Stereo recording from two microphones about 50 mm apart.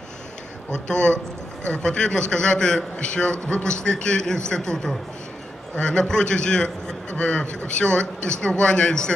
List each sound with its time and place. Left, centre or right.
0.8 s a man's voice: centre